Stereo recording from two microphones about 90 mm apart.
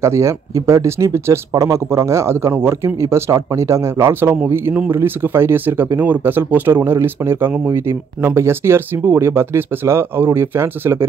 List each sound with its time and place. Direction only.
0.0 s speech: 30° right (ahead or behind)